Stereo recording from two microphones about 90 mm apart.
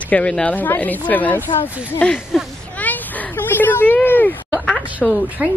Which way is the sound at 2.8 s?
20° left (ahead or behind).